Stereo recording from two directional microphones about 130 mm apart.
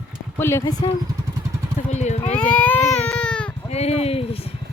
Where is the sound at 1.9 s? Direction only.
60° left (ahead or behind).